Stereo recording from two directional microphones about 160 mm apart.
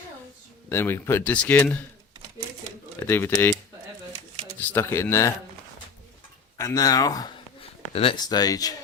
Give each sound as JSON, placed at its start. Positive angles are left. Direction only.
{"t": 0.7, "sound": "speech", "side_deg": 15}
{"t": 3.1, "sound": "speech", "side_deg": 15}
{"t": 4.6, "sound": "speech", "side_deg": 15}
{"t": 6.6, "sound": "speech", "side_deg": 20}
{"t": 7.6, "sound": "a sound", "side_deg": 35}
{"t": 8.2, "sound": "speech", "side_deg": 25}